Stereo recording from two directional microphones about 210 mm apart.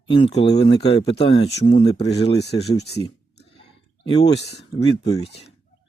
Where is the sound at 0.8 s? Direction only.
25° left (ahead or behind).